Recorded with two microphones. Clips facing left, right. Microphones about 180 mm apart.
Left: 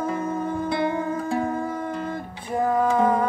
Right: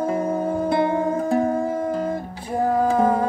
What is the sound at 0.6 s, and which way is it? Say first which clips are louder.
Music: right 5 dB; 45° right (ahead or behind).